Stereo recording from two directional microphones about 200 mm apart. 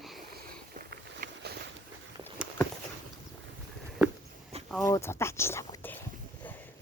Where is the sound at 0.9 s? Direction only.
55° right (ahead or behind).